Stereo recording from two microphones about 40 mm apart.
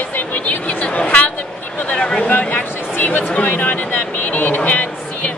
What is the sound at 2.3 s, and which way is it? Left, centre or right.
Speech, left.